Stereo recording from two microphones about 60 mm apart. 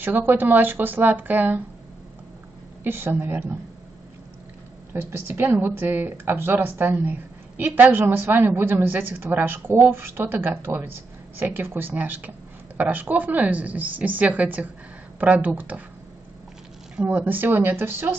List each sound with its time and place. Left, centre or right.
0.0 s a woman's voice: right
2.8 s a woman's voice: right
4.9 s a woman's voice: right
16.9 s a woman's voice: right